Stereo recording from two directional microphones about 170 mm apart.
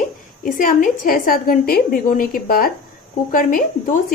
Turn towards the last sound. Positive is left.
turn(degrees=55)  # may be behind; listen again after turning